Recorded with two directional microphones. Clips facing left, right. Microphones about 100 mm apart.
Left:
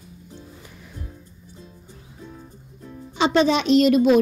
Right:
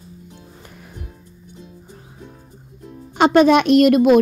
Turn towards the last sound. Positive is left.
turn(degrees=-55)  # may be behind; listen again after turning